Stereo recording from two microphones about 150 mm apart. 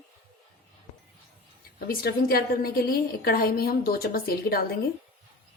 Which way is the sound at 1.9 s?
80° left.